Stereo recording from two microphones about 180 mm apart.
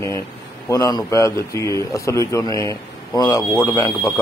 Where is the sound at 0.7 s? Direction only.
20° left (ahead or behind).